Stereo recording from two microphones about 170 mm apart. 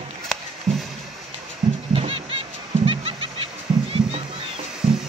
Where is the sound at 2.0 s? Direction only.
35° right (ahead or behind).